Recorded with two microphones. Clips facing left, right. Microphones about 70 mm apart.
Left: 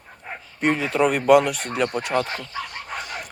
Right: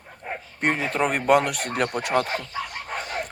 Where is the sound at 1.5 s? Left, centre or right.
Right.